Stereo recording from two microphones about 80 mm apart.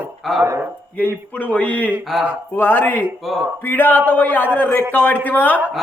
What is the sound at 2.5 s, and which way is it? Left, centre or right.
Speech, left.